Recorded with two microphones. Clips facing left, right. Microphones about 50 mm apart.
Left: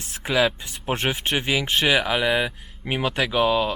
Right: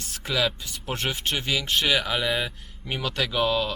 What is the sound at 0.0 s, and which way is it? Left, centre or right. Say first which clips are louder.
Speech: left 5 dB; left.